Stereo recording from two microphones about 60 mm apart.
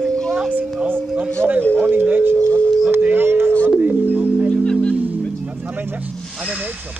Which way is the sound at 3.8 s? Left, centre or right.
Right.